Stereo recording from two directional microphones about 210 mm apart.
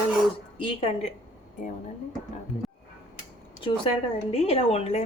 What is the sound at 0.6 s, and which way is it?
Speech, 30° left (ahead or behind).